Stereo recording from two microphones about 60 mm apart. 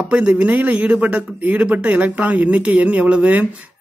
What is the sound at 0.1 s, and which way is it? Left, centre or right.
Speech, right.